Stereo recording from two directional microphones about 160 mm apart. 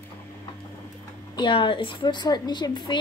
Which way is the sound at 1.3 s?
30° left (ahead or behind).